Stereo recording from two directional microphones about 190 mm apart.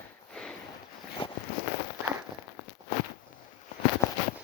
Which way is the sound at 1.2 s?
25° left (ahead or behind).